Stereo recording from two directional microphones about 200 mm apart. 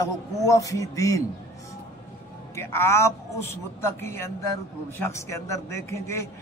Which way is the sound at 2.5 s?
15° left (ahead or behind).